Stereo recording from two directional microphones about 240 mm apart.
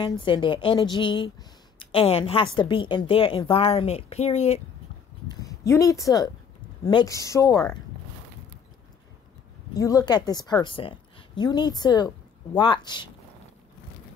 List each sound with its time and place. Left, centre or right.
0.2 s a woman's voice: centre
5.3 s a woman's voice: centre
9.8 s a woman's voice: centre